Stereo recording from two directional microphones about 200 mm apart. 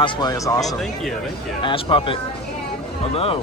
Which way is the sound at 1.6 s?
25° left (ahead or behind).